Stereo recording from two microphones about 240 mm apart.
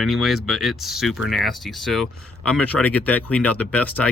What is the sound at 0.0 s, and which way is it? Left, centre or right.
Speech, centre.